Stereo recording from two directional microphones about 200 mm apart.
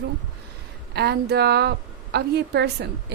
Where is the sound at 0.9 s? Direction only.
55° right (ahead or behind).